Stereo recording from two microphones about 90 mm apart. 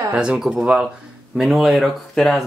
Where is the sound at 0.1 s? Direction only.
10° right (ahead or behind).